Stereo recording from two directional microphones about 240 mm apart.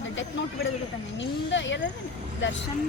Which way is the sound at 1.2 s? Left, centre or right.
Left.